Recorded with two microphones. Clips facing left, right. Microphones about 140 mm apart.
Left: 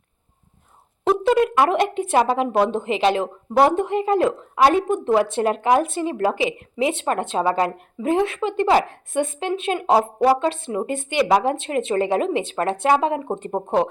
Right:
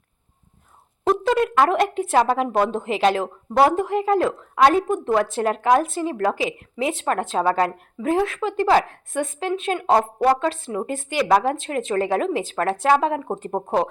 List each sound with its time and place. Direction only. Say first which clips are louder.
1.0 s speech: left 2 dB; 5° left (ahead or behind)